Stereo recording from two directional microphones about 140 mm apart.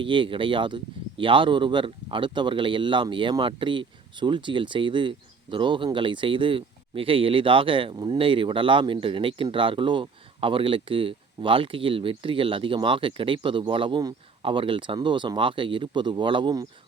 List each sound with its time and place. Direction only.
0.0 s speech: 35° right (ahead or behind)